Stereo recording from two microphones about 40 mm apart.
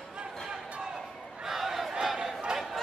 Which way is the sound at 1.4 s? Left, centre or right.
Centre.